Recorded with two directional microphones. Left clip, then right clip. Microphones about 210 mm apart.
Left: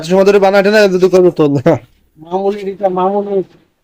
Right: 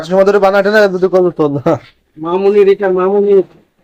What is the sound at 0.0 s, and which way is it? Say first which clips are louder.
A man's voice: even; 30° left (ahead or behind).